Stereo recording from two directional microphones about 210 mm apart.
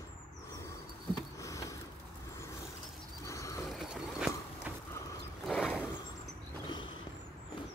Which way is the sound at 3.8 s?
Centre (ahead or behind).